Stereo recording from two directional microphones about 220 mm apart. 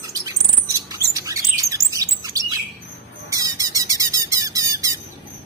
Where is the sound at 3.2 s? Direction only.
15° right (ahead or behind).